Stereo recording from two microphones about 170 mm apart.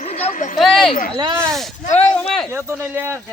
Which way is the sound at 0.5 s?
Centre (ahead or behind).